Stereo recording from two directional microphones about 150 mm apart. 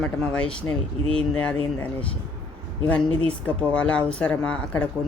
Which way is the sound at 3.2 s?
10° left (ahead or behind).